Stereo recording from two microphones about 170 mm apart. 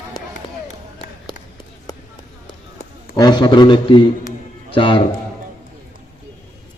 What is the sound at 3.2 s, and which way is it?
A man's voice, 25° left (ahead or behind).